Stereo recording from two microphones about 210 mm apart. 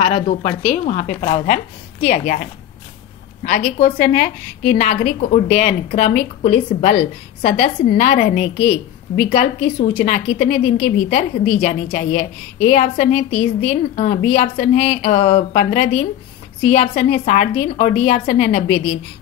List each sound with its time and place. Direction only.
0.3 s a woman's voice: 35° left (ahead or behind)
3.4 s a woman's voice: 35° left (ahead or behind)